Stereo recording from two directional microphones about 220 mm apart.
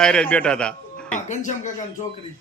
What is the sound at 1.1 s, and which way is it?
Speech, 35° left (ahead or behind).